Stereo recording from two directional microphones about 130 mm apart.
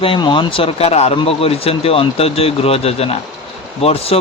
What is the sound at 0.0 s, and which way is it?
Speech, 40° left (ahead or behind).